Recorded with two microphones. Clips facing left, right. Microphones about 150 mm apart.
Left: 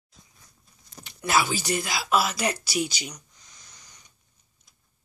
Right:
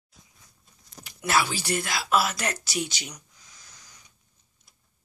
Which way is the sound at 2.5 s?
Centre (ahead or behind).